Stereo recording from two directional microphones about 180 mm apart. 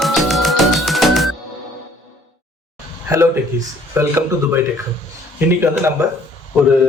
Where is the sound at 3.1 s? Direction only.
15° right (ahead or behind).